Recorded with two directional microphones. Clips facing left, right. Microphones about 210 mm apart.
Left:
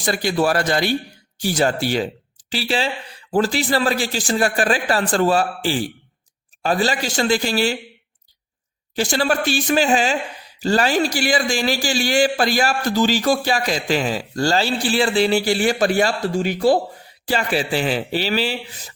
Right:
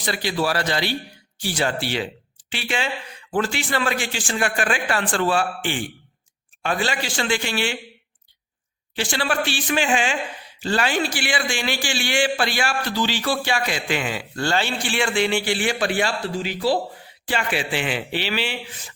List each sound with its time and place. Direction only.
0.0 s a man's voice: 45° left (ahead or behind)
9.0 s a man's voice: 40° left (ahead or behind)
17.2 s a man's voice: 40° left (ahead or behind)